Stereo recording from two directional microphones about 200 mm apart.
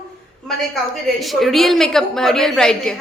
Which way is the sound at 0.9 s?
Centre (ahead or behind).